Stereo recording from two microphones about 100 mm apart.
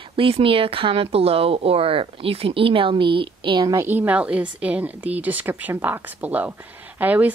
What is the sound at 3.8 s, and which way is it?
Speech, 15° right (ahead or behind).